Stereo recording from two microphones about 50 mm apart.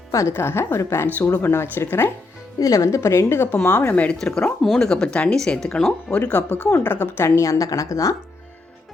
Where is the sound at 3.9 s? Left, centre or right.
Left.